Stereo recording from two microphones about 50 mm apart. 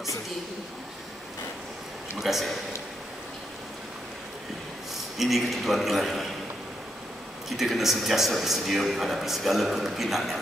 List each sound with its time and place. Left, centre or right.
2.1 s a man's voice: centre
5.1 s a man's voice: centre
7.4 s a man's voice: centre